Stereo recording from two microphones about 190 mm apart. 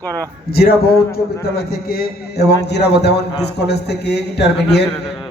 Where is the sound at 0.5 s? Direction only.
55° left (ahead or behind).